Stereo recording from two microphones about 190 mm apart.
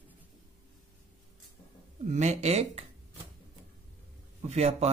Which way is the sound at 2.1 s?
40° right (ahead or behind).